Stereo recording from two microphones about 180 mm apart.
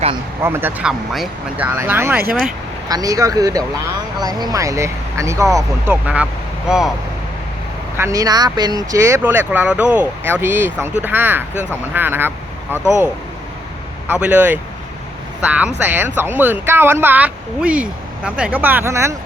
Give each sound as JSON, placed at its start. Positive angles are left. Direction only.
{"t": 0.4, "sound": "speech", "side_deg": -10}
{"t": 7.9, "sound": "speech", "side_deg": -15}
{"t": 14.1, "sound": "speech", "side_deg": -10}